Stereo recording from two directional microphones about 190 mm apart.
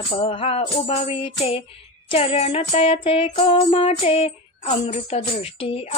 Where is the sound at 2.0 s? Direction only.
30° left (ahead or behind).